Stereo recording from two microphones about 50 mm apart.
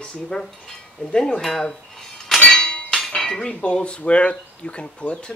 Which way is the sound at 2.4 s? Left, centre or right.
Centre.